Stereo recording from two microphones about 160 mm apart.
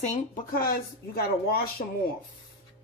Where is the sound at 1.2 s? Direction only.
75° left (ahead or behind).